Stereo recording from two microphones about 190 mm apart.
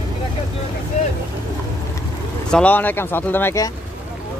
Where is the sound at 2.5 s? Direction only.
10° left (ahead or behind).